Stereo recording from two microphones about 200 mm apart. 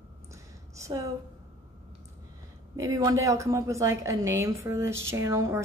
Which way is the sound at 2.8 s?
15° right (ahead or behind).